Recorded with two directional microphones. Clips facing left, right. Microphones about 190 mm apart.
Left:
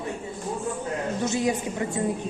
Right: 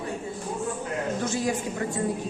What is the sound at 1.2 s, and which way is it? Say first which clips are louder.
Speech: left 4 dB; 20° left (ahead or behind).